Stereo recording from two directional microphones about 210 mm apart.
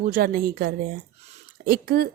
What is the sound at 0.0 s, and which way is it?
A woman's voice, 45° right (ahead or behind).